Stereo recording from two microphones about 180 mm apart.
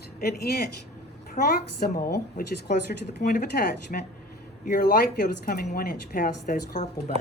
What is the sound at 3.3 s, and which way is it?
Speech, 60° left (ahead or behind).